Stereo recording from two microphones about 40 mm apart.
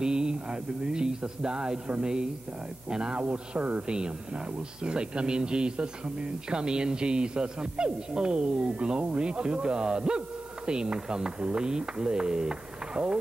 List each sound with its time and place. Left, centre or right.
0.0 s speech: right